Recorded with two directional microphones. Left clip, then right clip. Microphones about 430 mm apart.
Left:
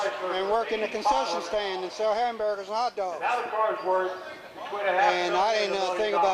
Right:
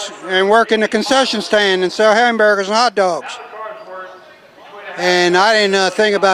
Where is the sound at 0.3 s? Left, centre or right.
Right.